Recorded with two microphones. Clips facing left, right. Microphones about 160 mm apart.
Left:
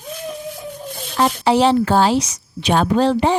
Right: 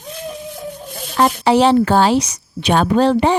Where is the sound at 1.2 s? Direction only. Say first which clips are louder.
Right 2 dB; 65° right (ahead or behind).